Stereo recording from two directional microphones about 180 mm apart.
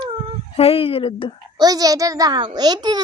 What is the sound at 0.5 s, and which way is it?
Speech, 30° left (ahead or behind).